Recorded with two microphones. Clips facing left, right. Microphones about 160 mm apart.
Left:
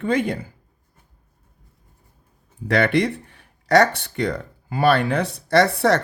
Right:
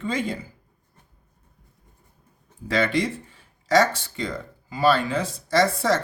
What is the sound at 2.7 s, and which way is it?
Speech, 65° left (ahead or behind).